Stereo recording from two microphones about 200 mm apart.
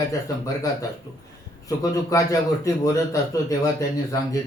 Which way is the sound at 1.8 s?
15° left (ahead or behind).